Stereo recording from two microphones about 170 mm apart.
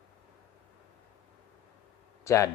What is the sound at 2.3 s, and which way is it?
Speech, 15° left (ahead or behind).